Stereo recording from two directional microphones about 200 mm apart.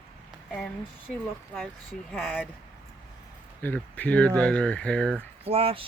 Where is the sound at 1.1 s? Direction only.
Centre (ahead or behind).